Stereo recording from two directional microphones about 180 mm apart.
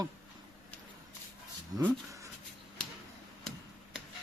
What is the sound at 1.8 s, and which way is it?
Speech, 15° right (ahead or behind).